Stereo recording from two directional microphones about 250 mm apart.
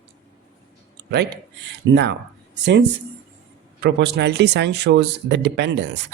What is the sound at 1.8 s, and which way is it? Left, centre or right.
Speech, right.